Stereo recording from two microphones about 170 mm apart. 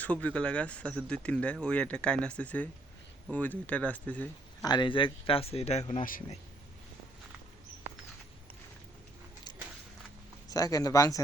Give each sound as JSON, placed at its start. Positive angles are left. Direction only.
{"t": 0.0, "sound": "speech", "side_deg": 10}
{"t": 4.6, "sound": "speech", "side_deg": 25}
{"t": 5.9, "sound": "speech", "side_deg": 50}
{"t": 10.5, "sound": "speech", "side_deg": 20}